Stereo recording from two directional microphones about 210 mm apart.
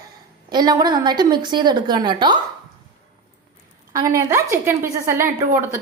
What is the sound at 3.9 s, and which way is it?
A woman's voice, 15° right (ahead or behind).